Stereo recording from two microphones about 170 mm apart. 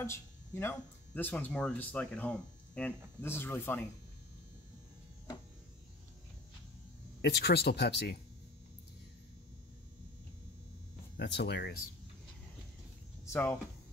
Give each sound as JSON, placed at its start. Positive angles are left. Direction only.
{"t": 0.0, "sound": "speech", "side_deg": 15}
{"t": 7.2, "sound": "speech", "side_deg": 85}
{"t": 11.1, "sound": "speech", "side_deg": 85}
{"t": 13.2, "sound": "speech", "side_deg": 15}